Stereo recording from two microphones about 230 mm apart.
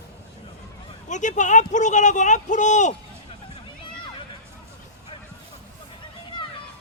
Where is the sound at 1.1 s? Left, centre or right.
Left.